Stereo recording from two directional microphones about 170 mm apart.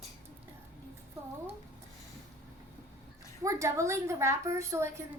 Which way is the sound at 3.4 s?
15° right (ahead or behind).